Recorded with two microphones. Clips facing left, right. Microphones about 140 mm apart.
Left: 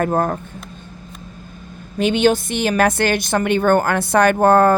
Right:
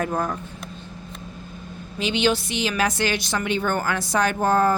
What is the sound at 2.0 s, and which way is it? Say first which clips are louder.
A woman's voice: left 6 dB; 50° left (ahead or behind).